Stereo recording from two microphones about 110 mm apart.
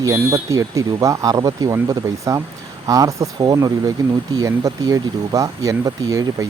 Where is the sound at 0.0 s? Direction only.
30° right (ahead or behind).